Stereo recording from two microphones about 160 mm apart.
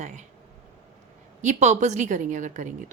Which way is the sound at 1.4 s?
45° right (ahead or behind).